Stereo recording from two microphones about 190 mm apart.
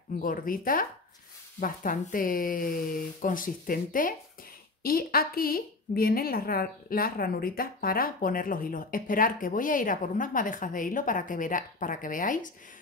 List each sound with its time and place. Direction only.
0.2 s a woman's voice: 45° left (ahead or behind)